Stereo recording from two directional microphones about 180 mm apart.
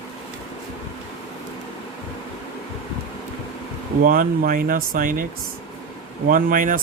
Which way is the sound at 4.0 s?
50° right (ahead or behind).